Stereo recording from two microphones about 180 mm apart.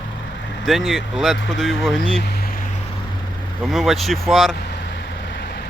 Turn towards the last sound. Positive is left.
turn(degrees=0)  # may be behind; listen again after turning